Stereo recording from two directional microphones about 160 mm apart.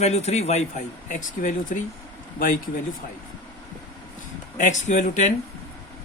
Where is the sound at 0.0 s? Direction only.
45° left (ahead or behind).